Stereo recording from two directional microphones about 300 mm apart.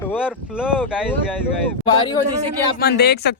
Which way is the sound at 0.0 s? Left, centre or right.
Centre.